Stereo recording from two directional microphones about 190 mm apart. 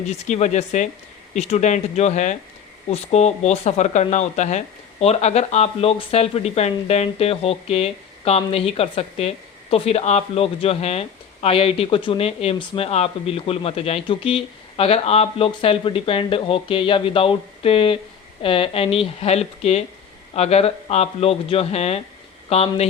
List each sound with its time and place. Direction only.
0.3 s speech: 35° left (ahead or behind)